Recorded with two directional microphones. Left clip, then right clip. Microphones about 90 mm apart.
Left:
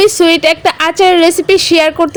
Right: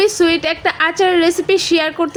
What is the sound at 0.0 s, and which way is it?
A woman's voice, 70° left (ahead or behind).